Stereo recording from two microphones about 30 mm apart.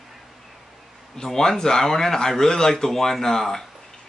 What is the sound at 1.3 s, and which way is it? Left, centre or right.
A man's voice, centre.